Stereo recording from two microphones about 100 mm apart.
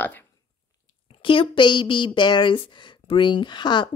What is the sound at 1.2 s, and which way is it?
Speech, 60° left (ahead or behind).